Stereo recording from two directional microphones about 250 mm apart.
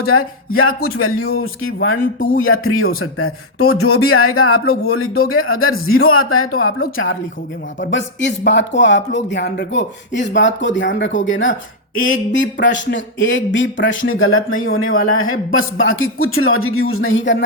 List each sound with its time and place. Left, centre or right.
0.0 s speech: left
12.1 s speech: left
14.7 s speech: left
15.0 s speech: left